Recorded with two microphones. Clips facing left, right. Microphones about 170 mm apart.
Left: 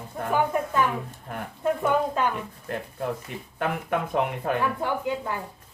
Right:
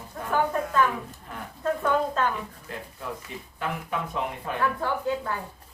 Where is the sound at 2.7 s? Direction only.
60° left (ahead or behind).